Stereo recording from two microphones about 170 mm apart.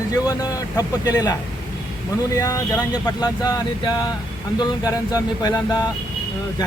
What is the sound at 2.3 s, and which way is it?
Speech, 20° left (ahead or behind).